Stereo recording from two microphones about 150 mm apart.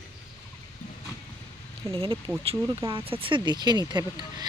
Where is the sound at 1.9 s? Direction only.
35° right (ahead or behind).